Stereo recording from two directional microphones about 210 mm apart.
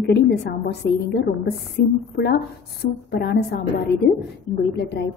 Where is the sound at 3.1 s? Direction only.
50° left (ahead or behind).